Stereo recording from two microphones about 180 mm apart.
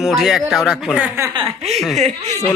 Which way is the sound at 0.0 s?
Centre (ahead or behind).